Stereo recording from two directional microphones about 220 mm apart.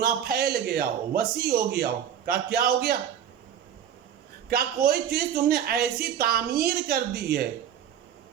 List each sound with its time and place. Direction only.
0.0 s a man's voice: 45° right (ahead or behind)
4.4 s a man's voice: 45° right (ahead or behind)